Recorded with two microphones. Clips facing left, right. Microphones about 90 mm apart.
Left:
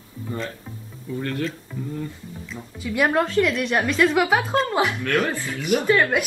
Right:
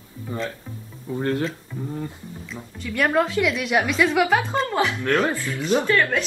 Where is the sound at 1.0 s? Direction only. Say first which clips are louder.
Right 3 dB; 30° right (ahead or behind).